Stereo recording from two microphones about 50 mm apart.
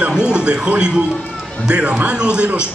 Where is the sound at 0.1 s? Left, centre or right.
Centre.